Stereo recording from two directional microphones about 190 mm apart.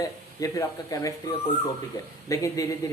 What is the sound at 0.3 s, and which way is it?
Speech, 20° left (ahead or behind).